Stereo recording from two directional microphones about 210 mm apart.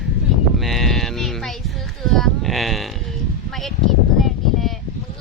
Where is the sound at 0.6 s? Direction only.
Centre (ahead or behind).